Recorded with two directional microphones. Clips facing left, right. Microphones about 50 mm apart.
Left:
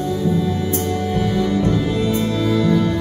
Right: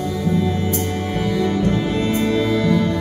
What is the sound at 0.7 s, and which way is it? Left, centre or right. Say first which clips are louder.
Music: left 2 dB; right.